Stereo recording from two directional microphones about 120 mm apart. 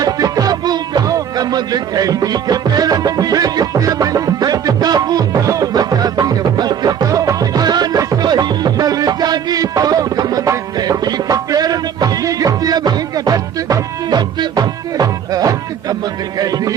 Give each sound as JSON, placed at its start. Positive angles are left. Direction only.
{"t": 0.0, "sound": "music", "side_deg": -30}